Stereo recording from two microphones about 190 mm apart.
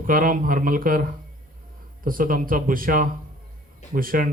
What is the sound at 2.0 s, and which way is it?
Speech, 45° right (ahead or behind).